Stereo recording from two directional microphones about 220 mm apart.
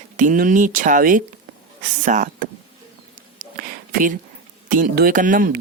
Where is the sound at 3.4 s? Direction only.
40° right (ahead or behind).